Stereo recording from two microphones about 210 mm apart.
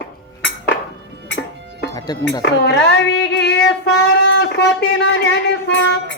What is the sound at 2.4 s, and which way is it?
Child singing, 55° left (ahead or behind).